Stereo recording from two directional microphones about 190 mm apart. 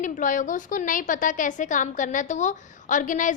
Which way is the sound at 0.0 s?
45° left (ahead or behind).